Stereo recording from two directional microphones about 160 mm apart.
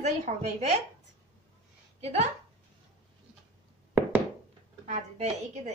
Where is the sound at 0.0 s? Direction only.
45° right (ahead or behind).